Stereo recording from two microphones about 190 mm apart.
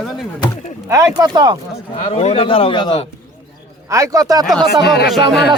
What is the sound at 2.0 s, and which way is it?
A man's voice, 35° left (ahead or behind).